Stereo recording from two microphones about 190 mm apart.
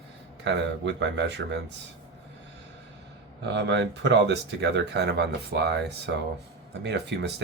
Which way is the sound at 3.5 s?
65° right (ahead or behind).